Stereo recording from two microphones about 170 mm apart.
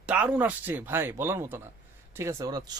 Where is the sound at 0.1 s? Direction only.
10° right (ahead or behind).